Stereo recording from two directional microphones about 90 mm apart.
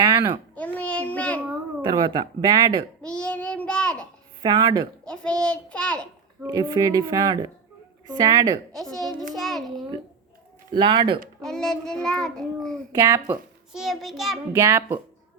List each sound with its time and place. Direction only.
0.5 s child singing: 15° left (ahead or behind)
1.8 s speech: 45° right (ahead or behind)
3.1 s child singing: 10° left (ahead or behind)
4.4 s speech: 45° right (ahead or behind)
5.0 s child singing: 10° left (ahead or behind)
6.5 s speech: 40° right (ahead or behind)
8.7 s a child's voice: 5° left (ahead or behind)
10.8 s speech: 65° right (ahead or behind)
11.3 s child singing: 5° left (ahead or behind)
12.9 s speech: 40° right (ahead or behind)
13.7 s a child's voice: 5° right (ahead or behind)
14.5 s speech: 30° right (ahead or behind)